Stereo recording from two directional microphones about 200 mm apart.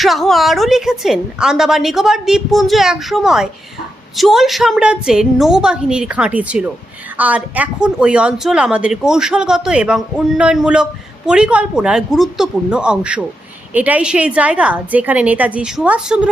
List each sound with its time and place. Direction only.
0.0 s a woman's voice: centre (ahead or behind)